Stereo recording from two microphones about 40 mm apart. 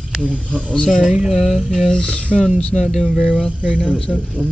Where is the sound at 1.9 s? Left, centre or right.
Left.